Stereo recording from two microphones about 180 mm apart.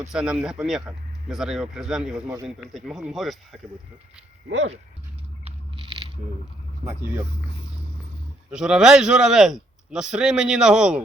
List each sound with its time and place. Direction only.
0.1 s a man's voice: 5° right (ahead or behind)
5.5 s a sound: 25° right (ahead or behind)
8.4 s a man's voice: 5° right (ahead or behind)